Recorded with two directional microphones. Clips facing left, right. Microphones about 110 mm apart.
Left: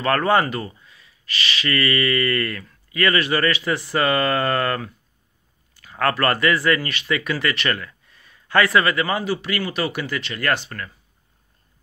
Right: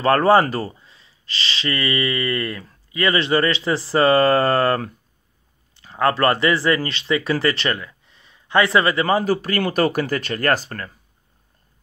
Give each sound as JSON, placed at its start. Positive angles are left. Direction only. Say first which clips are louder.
{"t": 0.0, "sound": "speech", "louder": "right 4 dB", "side_deg": -30}